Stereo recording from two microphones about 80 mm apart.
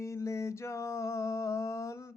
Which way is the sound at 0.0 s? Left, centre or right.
Left.